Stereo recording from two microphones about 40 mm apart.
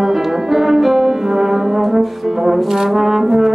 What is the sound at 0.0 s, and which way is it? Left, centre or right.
Brass instrument, centre.